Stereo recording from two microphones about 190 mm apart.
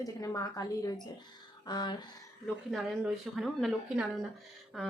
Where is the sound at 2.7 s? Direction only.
Centre (ahead or behind).